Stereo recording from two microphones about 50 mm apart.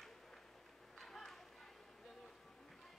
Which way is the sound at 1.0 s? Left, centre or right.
Centre.